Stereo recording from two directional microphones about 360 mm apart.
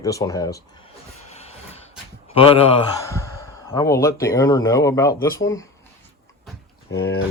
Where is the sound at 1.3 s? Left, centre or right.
Centre.